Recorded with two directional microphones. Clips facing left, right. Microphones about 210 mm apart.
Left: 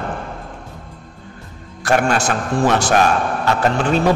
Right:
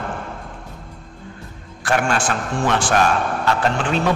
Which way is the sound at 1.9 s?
40° left (ahead or behind).